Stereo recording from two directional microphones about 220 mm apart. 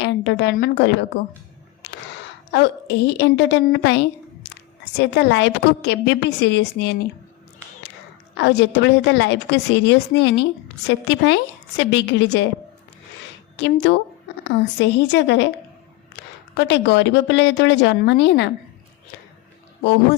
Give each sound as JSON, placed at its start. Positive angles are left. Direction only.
{"t": 0.0, "sound": "a woman's voice", "side_deg": 50}
{"t": 2.5, "sound": "a woman's voice", "side_deg": 50}
{"t": 8.4, "sound": "a woman's voice", "side_deg": 50}
{"t": 13.6, "sound": "a woman's voice", "side_deg": 55}
{"t": 16.6, "sound": "a woman's voice", "side_deg": 50}